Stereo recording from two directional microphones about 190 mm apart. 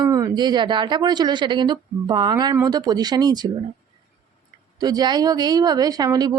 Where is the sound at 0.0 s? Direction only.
20° right (ahead or behind).